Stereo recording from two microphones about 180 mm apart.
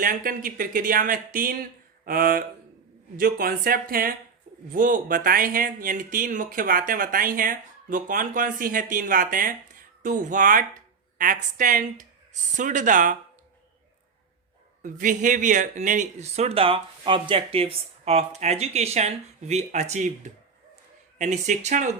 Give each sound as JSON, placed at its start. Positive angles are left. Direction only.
{"t": 0.0, "sound": "speech", "side_deg": -50}
{"t": 14.8, "sound": "speech", "side_deg": -45}
{"t": 21.2, "sound": "speech", "side_deg": -40}